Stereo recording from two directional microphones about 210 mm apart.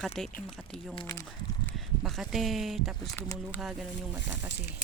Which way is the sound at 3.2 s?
10° left (ahead or behind).